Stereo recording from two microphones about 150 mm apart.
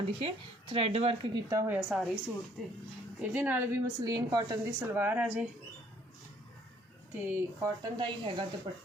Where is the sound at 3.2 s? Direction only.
10° right (ahead or behind).